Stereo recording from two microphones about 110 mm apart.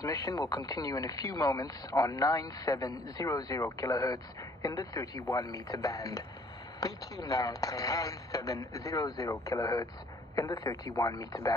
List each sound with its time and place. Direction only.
0.0 s speech: 35° left (ahead or behind)